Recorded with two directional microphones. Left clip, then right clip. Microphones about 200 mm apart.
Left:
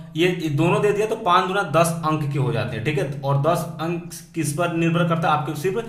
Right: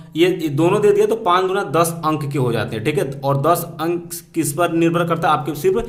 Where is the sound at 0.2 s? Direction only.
35° right (ahead or behind).